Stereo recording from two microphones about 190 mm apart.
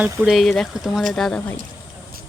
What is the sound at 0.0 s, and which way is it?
Speech, 5° right (ahead or behind).